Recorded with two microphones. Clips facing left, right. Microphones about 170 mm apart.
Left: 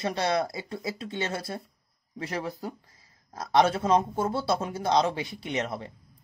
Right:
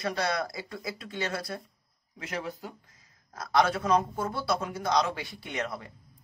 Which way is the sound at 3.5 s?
25° left (ahead or behind).